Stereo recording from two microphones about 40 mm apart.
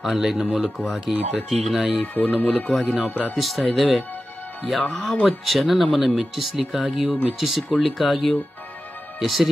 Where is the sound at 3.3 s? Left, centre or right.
Centre.